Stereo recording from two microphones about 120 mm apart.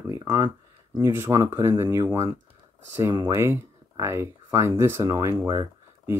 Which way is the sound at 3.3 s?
20° right (ahead or behind).